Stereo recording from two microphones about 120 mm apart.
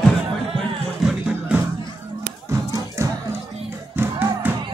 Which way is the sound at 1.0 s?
5° right (ahead or behind).